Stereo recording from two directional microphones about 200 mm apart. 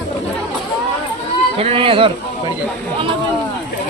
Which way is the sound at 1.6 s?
30° right (ahead or behind).